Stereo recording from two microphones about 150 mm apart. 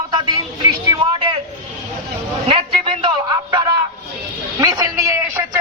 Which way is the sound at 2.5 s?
40° right (ahead or behind).